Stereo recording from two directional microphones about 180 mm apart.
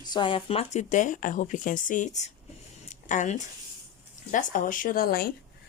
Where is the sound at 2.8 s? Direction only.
45° left (ahead or behind).